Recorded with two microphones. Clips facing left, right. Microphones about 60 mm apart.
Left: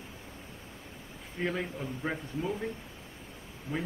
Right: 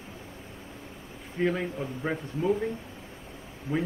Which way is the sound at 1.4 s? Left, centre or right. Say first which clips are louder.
Right 5 dB; centre.